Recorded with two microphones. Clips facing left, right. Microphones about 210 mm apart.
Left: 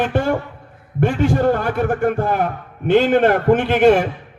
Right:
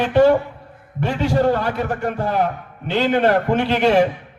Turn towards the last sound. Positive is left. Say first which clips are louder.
# left 4 dB
turn(degrees=50)  # may be behind; listen again after turning